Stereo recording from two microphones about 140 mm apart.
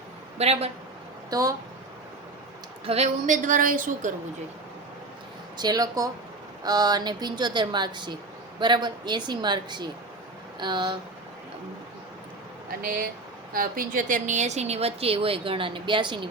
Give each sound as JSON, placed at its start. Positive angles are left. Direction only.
{"t": 0.3, "sound": "a woman's voice", "side_deg": -50}
{"t": 1.3, "sound": "speech", "side_deg": -25}
{"t": 2.8, "sound": "a woman's voice", "side_deg": -45}
{"t": 3.2, "sound": "a woman's voice", "side_deg": -70}
{"t": 5.5, "sound": "a woman's voice", "side_deg": -30}
{"t": 12.8, "sound": "a woman's voice", "side_deg": -90}